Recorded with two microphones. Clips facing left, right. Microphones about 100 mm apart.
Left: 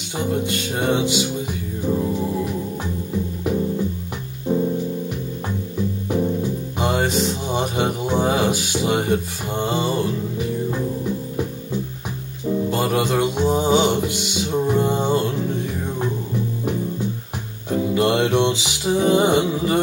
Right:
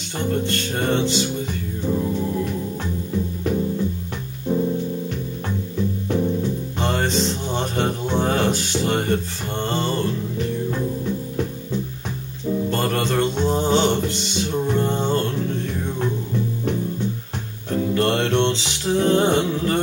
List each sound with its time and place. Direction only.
0.2 s music: 10° left (ahead or behind)
4.5 s music: 15° left (ahead or behind)
5.8 s music: 15° left (ahead or behind)
17.6 s music: 10° left (ahead or behind)